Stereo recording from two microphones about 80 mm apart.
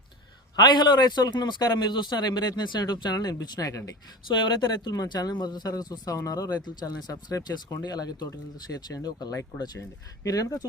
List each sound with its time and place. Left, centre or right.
0.5 s a man's voice: left
3.5 s speech: left
4.4 s a man's voice: left